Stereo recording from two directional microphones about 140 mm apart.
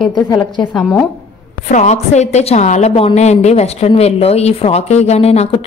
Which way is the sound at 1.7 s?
55° left (ahead or behind).